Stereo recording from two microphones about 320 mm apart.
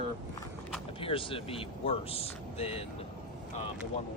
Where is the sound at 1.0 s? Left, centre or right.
Centre.